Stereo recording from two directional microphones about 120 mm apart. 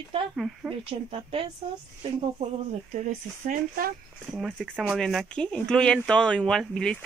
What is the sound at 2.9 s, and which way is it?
Speech, 90° right.